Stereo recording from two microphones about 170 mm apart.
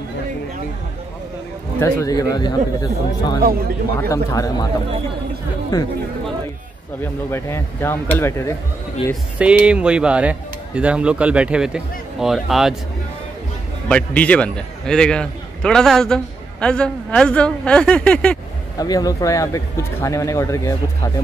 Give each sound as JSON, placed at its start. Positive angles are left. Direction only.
{"t": 1.8, "sound": "speech", "side_deg": 20}
{"t": 3.4, "sound": "a man's voice", "side_deg": -65}
{"t": 4.1, "sound": "speech", "side_deg": 20}
{"t": 7.2, "sound": "speech", "side_deg": 15}
{"t": 9.1, "sound": "a man's voice", "side_deg": -5}
{"t": 13.8, "sound": "a man's voice", "side_deg": 5}
{"t": 18.8, "sound": "speech", "side_deg": 20}